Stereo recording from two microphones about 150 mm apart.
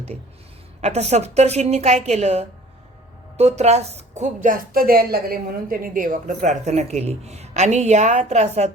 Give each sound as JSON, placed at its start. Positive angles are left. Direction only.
{"t": 0.8, "sound": "a woman's voice", "side_deg": -45}